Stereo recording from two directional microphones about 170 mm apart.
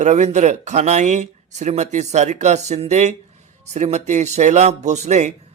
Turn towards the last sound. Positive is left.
turn(degrees=-45)  # may be behind; listen again after turning